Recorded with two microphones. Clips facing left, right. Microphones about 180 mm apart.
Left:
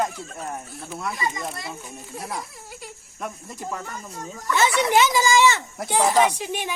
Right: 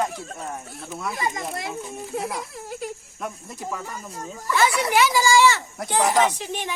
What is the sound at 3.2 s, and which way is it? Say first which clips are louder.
Speech: left 1 dB; 5° right (ahead or behind).